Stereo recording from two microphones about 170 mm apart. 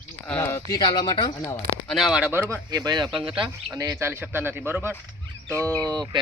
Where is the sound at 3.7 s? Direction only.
15° right (ahead or behind).